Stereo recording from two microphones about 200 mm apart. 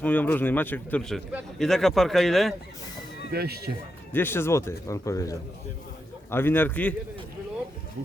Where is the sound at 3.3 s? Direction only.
50° right (ahead or behind).